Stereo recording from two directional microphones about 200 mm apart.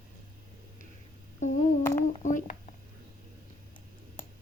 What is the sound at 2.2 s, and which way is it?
Speech, 40° left (ahead or behind).